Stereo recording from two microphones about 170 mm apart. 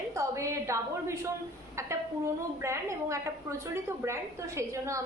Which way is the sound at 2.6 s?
15° right (ahead or behind).